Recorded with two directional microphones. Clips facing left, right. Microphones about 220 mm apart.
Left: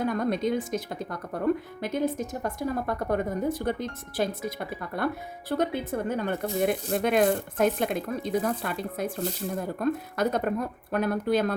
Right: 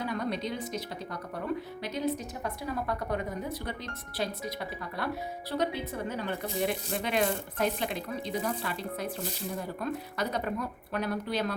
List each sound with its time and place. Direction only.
0.0 s speech: 50° left (ahead or behind)